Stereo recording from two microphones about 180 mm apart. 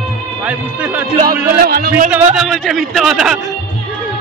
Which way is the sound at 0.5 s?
10° right (ahead or behind).